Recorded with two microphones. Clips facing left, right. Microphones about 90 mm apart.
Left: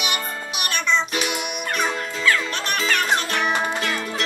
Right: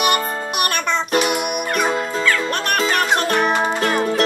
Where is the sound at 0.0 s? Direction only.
50° right (ahead or behind).